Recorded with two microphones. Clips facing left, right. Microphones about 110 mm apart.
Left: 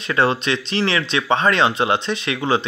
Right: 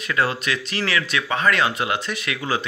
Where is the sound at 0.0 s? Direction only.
30° left (ahead or behind).